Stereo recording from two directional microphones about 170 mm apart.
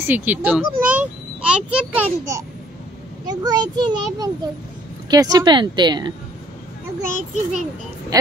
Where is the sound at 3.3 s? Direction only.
25° right (ahead or behind).